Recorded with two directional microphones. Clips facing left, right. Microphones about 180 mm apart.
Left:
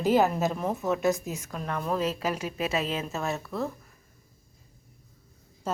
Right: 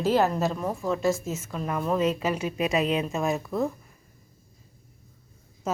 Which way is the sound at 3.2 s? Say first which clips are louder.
Right 5 dB; 15° right (ahead or behind).